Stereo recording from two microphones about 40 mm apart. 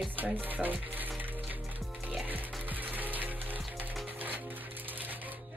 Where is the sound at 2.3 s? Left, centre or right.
Right.